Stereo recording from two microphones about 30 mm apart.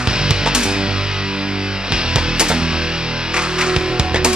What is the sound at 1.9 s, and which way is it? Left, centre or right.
Music, right.